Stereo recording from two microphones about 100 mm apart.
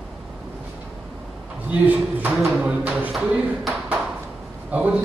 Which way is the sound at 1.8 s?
15° right (ahead or behind).